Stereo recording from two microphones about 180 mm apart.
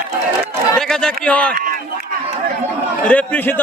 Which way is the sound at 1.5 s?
50° right (ahead or behind).